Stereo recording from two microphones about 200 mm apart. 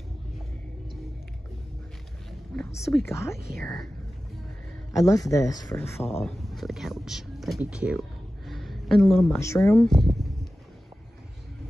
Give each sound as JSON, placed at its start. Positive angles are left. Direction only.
{"t": 2.5, "sound": "speech", "side_deg": 10}
{"t": 4.9, "sound": "speech", "side_deg": 15}
{"t": 6.2, "sound": "speech", "side_deg": 0}
{"t": 8.5, "sound": "a sound", "side_deg": 0}
{"t": 9.4, "sound": "speech", "side_deg": 10}
{"t": 9.9, "sound": "a sound", "side_deg": 0}